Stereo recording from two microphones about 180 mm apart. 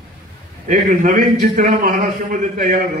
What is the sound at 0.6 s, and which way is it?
A man's voice, 45° right (ahead or behind).